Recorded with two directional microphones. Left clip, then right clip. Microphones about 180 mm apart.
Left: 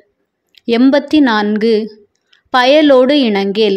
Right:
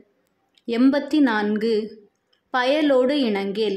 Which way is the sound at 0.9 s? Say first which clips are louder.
Left 9 dB; 30° left (ahead or behind).